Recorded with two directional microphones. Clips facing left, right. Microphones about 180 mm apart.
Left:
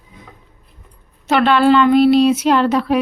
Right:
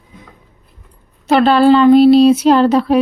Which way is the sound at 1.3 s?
35° right (ahead or behind).